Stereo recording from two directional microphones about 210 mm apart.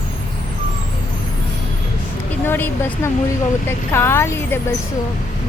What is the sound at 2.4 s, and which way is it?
Speech, 10° left (ahead or behind).